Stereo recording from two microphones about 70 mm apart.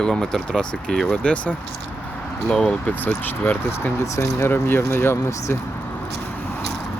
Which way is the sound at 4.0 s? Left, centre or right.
Left.